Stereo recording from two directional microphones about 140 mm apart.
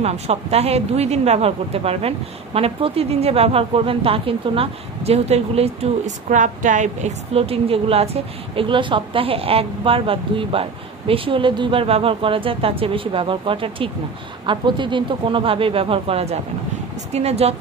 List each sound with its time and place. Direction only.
0.0 s speech: 50° right (ahead or behind)